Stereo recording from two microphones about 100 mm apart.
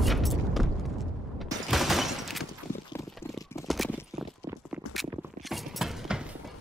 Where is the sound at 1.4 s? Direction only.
Centre (ahead or behind).